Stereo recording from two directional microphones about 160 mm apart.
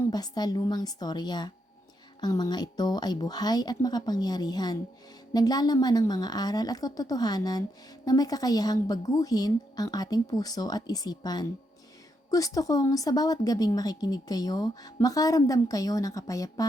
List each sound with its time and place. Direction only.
0.1 s speech: 25° left (ahead or behind)